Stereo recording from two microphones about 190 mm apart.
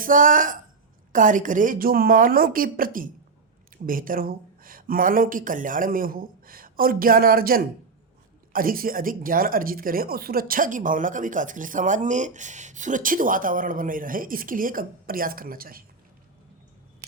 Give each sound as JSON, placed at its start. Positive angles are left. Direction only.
{"t": 0.0, "sound": "speech", "side_deg": -45}